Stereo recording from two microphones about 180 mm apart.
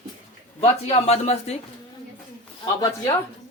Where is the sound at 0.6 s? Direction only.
35° left (ahead or behind).